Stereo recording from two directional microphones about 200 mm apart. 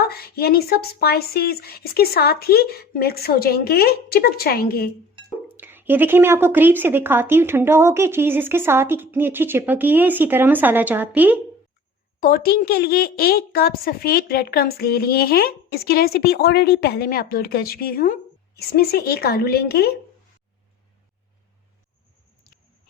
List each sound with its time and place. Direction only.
0.0 s a woman's voice: 50° left (ahead or behind)
5.5 s speech: 10° right (ahead or behind)
12.2 s a woman's voice: 50° left (ahead or behind)